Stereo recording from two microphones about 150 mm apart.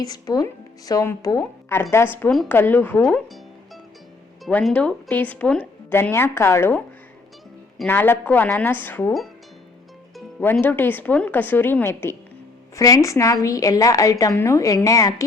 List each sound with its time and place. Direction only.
0.0 s a woman's voice: 25° left (ahead or behind)
4.4 s speech: 5° left (ahead or behind)
7.9 s speech: 15° left (ahead or behind)
10.4 s a woman's voice: 10° left (ahead or behind)